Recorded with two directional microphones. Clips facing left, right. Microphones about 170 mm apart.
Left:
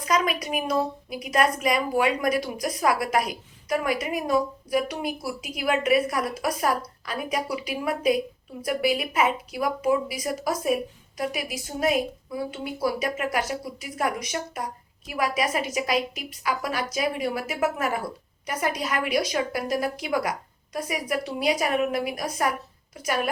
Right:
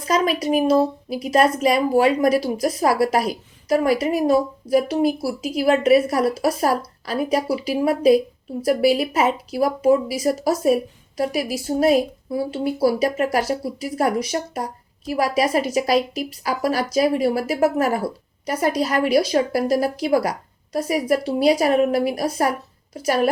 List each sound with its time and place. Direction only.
0.0 s a woman's voice: 30° right (ahead or behind)